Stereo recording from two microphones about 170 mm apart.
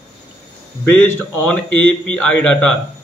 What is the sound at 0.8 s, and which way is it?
A man's voice, 5° left (ahead or behind).